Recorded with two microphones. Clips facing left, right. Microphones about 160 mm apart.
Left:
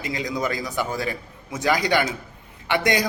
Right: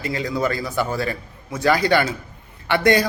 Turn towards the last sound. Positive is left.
turn(degrees=15)  # may be behind; listen again after turning